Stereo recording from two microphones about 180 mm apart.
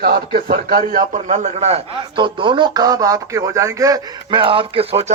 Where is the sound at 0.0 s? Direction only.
60° right (ahead or behind).